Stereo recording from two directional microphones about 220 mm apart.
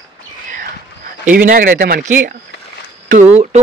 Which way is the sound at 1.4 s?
40° right (ahead or behind).